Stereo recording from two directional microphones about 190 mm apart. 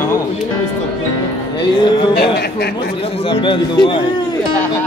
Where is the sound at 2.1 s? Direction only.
60° left (ahead or behind).